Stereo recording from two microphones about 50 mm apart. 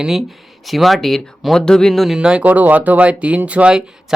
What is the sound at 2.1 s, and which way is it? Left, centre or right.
Speech, centre.